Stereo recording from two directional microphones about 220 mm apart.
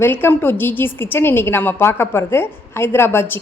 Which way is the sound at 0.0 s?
10° left (ahead or behind).